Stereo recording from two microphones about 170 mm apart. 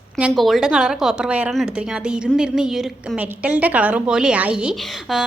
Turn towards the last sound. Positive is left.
turn(degrees=-5)  # may be behind; listen again after turning